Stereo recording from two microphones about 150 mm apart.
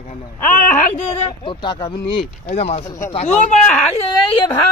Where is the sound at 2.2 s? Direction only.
45° left (ahead or behind).